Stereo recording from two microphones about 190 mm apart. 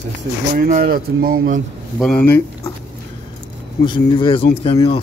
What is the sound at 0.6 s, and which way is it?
Speech, 50° right (ahead or behind).